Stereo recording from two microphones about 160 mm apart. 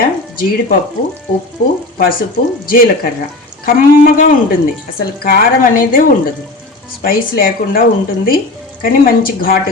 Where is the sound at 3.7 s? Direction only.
60° left (ahead or behind).